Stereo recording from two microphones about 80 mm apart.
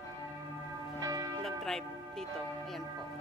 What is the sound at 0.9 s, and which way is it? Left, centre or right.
Church bell, right.